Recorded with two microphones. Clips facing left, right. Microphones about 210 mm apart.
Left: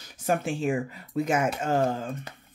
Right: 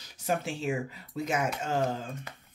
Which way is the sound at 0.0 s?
50° left (ahead or behind).